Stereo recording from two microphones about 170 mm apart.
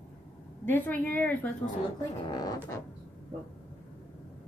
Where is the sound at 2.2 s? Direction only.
25° left (ahead or behind).